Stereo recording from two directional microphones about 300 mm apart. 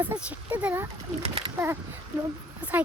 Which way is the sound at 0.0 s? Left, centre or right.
Centre.